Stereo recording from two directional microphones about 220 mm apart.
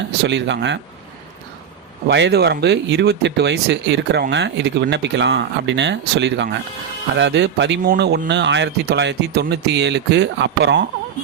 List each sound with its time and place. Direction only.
0.3 s speech: 55° right (ahead or behind)
2.0 s speech: 50° right (ahead or behind)